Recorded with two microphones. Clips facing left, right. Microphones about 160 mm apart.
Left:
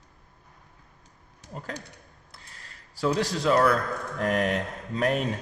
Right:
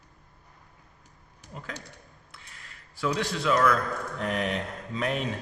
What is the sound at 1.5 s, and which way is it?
Speech, 40° left (ahead or behind).